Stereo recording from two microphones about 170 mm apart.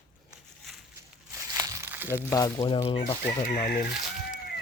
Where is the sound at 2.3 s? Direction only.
20° left (ahead or behind).